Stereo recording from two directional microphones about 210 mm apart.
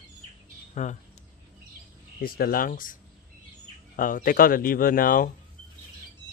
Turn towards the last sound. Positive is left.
turn(degrees=40)  # may be behind; listen again after turning